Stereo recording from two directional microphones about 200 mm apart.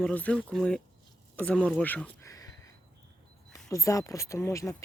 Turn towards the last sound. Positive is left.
turn(degrees=15)  # may be behind; listen again after turning